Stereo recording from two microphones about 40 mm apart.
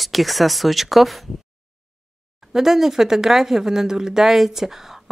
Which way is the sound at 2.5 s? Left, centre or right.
Centre.